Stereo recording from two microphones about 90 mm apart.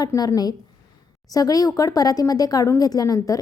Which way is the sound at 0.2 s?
45° left (ahead or behind).